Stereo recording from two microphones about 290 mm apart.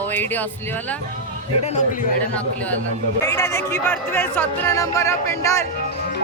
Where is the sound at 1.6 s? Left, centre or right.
Left.